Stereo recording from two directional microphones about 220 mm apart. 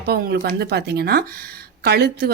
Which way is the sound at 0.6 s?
45° right (ahead or behind).